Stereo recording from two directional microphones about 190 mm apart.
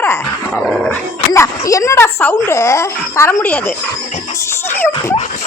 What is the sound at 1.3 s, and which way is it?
Speech, 15° left (ahead or behind).